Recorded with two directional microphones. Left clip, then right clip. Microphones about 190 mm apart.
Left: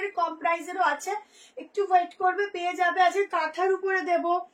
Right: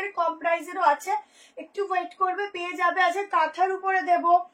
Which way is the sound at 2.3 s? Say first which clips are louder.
Left 2 dB; 10° left (ahead or behind).